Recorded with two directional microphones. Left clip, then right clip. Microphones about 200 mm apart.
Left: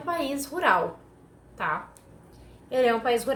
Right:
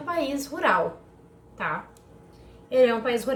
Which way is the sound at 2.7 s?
20° left (ahead or behind).